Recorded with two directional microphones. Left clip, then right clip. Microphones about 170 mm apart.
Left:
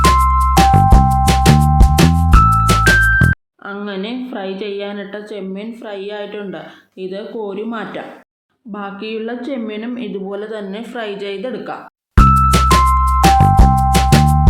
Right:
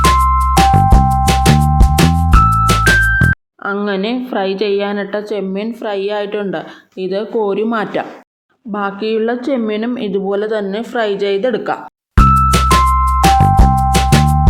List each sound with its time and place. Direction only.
0.0 s music: centre (ahead or behind)
3.7 s speech: 25° right (ahead or behind)
12.1 s music: centre (ahead or behind)